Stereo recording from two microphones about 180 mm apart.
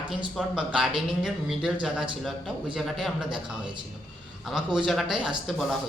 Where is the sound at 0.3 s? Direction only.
5° right (ahead or behind).